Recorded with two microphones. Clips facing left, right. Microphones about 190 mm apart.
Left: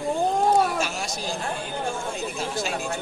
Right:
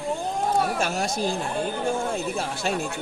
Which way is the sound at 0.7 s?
55° right (ahead or behind).